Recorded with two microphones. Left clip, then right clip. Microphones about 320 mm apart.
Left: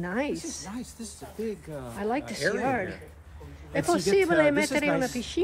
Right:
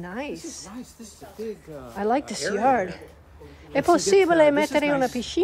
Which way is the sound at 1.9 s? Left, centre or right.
Centre.